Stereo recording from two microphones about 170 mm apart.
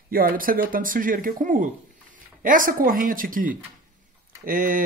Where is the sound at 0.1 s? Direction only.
55° right (ahead or behind).